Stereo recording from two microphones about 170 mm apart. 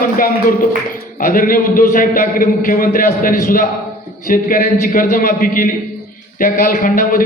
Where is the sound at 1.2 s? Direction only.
55° left (ahead or behind).